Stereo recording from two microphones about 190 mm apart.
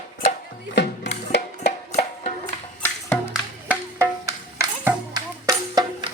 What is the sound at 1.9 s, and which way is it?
Music, 35° left (ahead or behind).